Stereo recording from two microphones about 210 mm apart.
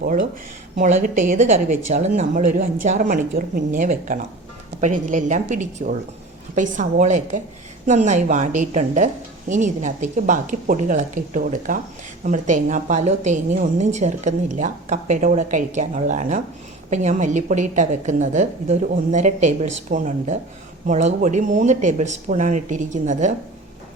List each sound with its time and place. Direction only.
0.8 s a woman's voice: 35° right (ahead or behind)